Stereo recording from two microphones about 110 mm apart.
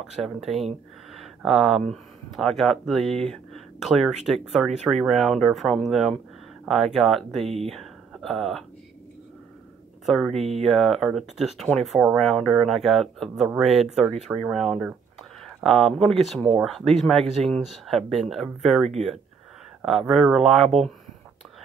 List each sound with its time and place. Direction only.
0.0 s speech: 5° right (ahead or behind)
1.1 s a sound: centre (ahead or behind)
1.9 s speech: centre (ahead or behind)
7.4 s speech: 65° right (ahead or behind)
7.7 s a sound: centre (ahead or behind)
10.0 s speech: centre (ahead or behind)